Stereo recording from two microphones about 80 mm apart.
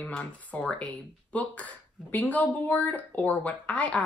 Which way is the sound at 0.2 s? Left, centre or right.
Centre.